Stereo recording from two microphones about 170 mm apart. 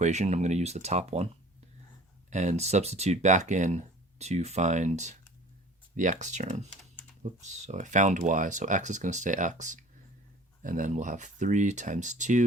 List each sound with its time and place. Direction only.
0.0 s speech: 45° right (ahead or behind)
2.3 s speech: 45° right (ahead or behind)